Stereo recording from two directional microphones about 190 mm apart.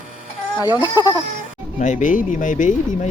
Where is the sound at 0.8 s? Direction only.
20° left (ahead or behind).